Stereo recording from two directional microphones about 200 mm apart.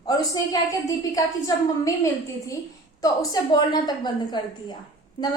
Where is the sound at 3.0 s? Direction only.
20° left (ahead or behind).